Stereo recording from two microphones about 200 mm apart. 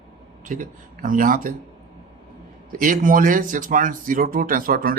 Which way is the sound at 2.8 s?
40° right (ahead or behind).